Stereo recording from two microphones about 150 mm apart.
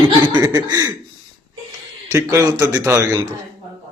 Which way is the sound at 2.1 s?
20° right (ahead or behind).